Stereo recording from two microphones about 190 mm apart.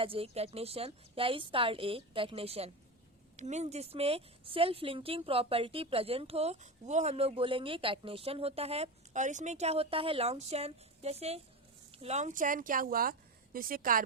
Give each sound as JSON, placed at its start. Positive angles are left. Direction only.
{"t": 0.0, "sound": "a woman's voice", "side_deg": -30}